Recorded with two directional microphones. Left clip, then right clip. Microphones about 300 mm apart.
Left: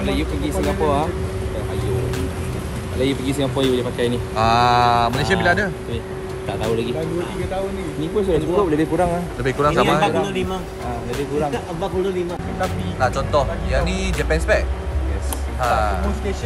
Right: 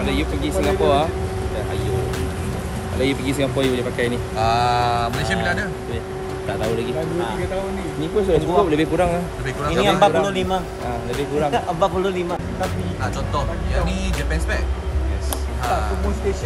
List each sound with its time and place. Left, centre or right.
0.0 s speech: centre
3.7 s speech: centre
4.4 s speech: centre
8.0 s speech: centre